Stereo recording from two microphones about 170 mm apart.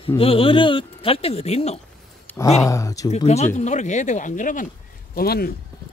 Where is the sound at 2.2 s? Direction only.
15° left (ahead or behind).